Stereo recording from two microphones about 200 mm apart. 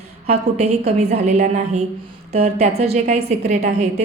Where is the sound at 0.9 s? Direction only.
35° right (ahead or behind).